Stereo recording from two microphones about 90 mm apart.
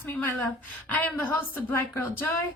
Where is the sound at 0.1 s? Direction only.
20° left (ahead or behind).